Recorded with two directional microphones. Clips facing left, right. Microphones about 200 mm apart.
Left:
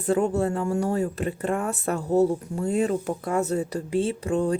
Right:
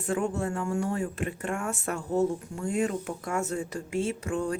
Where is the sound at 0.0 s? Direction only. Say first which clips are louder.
Left 6 dB; 35° left (ahead or behind).